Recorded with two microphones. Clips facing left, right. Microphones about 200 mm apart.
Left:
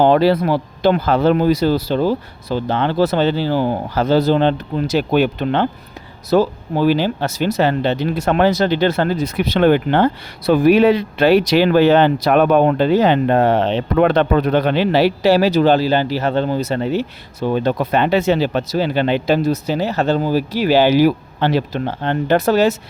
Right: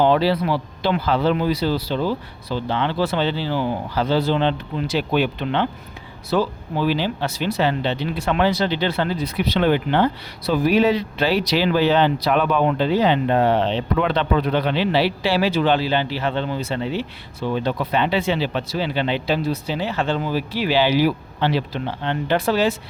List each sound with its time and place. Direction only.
0.0 s speech: 50° left (ahead or behind)